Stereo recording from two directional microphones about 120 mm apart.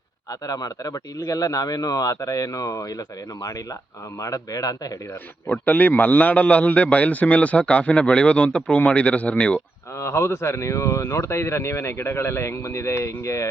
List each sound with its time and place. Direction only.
0.4 s speech: 30° left (ahead or behind)
4.2 s speech: 30° left (ahead or behind)
5.5 s a man's voice: 15° left (ahead or behind)
10.0 s speech: 25° left (ahead or behind)